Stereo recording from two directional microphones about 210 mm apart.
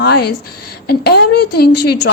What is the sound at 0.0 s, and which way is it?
A woman's voice, 50° left (ahead or behind).